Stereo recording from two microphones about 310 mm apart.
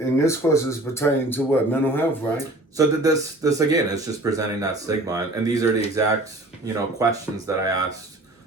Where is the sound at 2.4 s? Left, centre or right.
Centre.